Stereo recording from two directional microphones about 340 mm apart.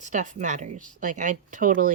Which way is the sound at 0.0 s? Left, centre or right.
Right.